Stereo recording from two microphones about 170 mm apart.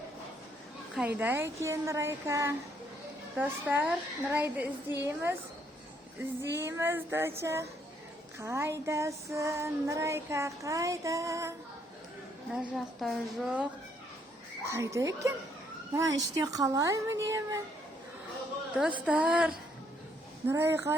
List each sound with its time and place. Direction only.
0.9 s child singing: 10° right (ahead or behind)
6.6 s child singing: 15° right (ahead or behind)
12.5 s a woman's voice: 5° right (ahead or behind)
14.6 s child singing: 15° right (ahead or behind)
16.0 s speech: 20° right (ahead or behind)
18.8 s a woman's voice: 5° right (ahead or behind)
20.5 s child singing: 15° right (ahead or behind)